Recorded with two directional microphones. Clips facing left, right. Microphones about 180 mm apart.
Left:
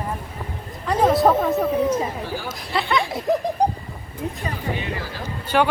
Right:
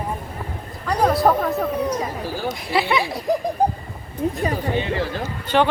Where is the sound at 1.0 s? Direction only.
Centre (ahead or behind).